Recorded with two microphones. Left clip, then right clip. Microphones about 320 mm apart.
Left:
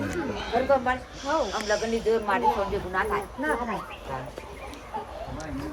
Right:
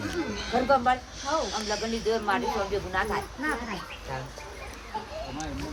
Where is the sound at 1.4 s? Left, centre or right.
Centre.